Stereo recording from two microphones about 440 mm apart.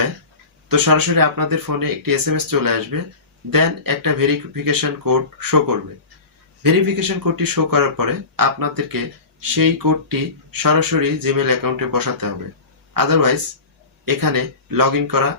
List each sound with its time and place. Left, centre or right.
0.7 s speech: right